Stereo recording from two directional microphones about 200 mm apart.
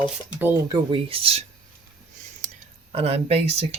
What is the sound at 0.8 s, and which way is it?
Speech, 25° right (ahead or behind).